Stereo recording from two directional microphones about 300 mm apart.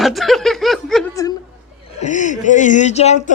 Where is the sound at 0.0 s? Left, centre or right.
Centre.